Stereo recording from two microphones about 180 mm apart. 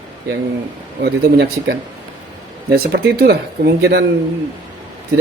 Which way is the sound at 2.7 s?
60° right (ahead or behind).